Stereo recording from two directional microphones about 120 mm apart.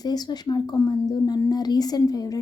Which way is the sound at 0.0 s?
35° left (ahead or behind).